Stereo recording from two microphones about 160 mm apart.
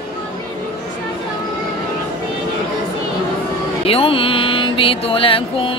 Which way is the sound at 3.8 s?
35° left (ahead or behind).